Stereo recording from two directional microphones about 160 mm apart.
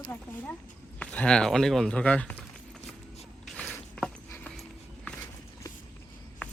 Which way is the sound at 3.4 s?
10° left (ahead or behind).